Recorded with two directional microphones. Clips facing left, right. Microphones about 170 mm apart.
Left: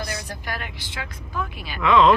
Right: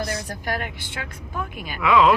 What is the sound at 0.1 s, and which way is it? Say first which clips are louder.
A woman's voice: right 4 dB; 50° right (ahead or behind).